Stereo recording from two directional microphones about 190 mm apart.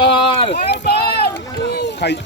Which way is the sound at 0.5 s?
55° left (ahead or behind).